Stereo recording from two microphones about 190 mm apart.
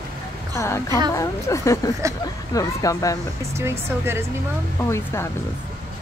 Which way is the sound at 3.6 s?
15° right (ahead or behind).